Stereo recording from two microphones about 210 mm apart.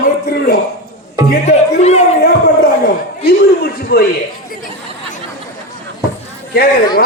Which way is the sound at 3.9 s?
45° left (ahead or behind).